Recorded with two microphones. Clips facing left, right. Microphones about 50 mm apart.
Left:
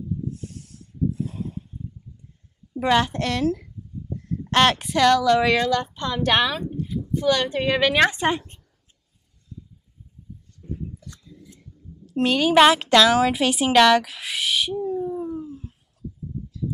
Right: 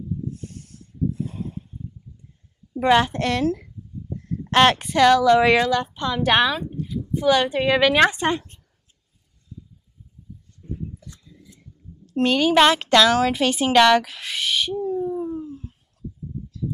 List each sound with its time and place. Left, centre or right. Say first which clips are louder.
0.3 s snake: even; centre
2.7 s speech: right 3 dB; centre
5.4 s speech: right 2 dB; right
5.9 s a woman's voice: right 2 dB; centre
8.2 s a woman's voice: even; centre
10.6 s a sound: even; centre
12.1 s a woman's voice: right 1 dB; centre
15.3 s dog: right 1 dB; centre